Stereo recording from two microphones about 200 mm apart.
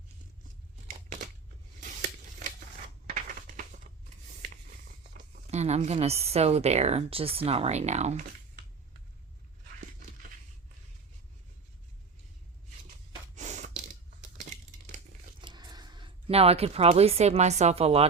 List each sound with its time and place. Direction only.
1.8 s a sound: 40° right (ahead or behind)
5.1 s speech: 40° right (ahead or behind)
13.3 s gasp: 35° right (ahead or behind)
15.4 s speech: 20° right (ahead or behind)